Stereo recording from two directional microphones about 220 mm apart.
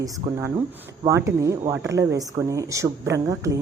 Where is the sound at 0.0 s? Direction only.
15° right (ahead or behind).